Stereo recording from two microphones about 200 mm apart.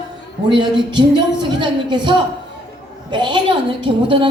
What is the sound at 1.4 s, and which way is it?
Speech, 25° right (ahead or behind).